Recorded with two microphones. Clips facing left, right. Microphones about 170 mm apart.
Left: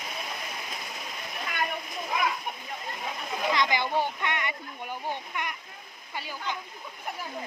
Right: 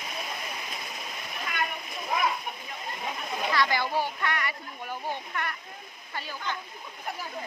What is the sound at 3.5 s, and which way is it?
A child's voice, 20° left (ahead or behind).